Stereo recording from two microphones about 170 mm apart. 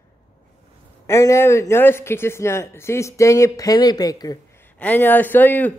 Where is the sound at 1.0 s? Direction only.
15° left (ahead or behind).